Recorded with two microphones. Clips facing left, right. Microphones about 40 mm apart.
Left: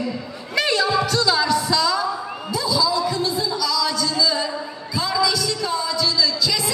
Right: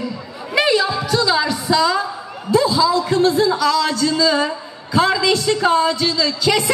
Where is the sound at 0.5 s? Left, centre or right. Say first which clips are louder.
Right 3 dB; centre.